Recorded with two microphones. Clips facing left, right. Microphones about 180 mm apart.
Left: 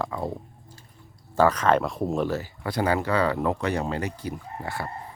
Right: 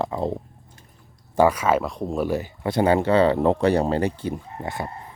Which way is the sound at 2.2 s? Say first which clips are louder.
Right 4 dB; 15° right (ahead or behind).